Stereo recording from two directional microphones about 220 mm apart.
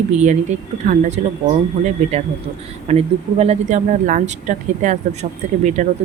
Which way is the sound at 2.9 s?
30° right (ahead or behind).